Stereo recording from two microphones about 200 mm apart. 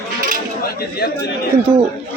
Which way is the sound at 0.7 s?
55° left (ahead or behind).